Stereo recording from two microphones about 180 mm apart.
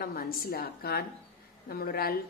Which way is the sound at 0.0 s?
55° left (ahead or behind).